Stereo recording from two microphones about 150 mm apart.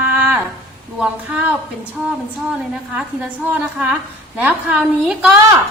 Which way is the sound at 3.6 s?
10° right (ahead or behind).